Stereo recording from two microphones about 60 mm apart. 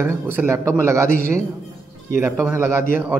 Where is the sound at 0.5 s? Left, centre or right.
Right.